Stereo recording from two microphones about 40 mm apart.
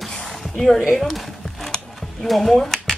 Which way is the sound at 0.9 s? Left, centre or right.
Centre.